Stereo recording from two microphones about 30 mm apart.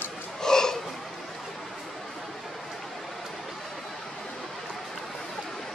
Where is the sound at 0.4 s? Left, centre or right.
Centre.